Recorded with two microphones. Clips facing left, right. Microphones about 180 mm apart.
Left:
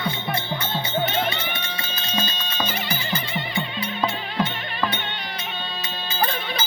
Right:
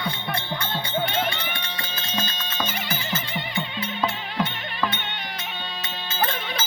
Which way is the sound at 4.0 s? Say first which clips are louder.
Left 2 dB; 15° left (ahead or behind).